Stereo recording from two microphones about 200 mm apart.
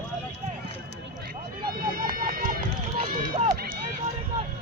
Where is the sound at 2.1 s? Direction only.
45° right (ahead or behind).